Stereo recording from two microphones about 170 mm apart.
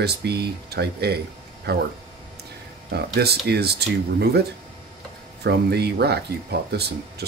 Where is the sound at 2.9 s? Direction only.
70° right (ahead or behind).